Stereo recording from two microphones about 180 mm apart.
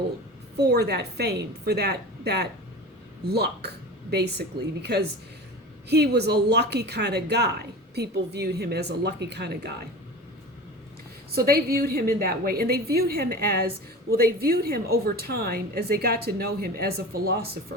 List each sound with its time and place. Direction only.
0.5 s a woman's voice: 60° right (ahead or behind)
11.3 s a woman's voice: 60° right (ahead or behind)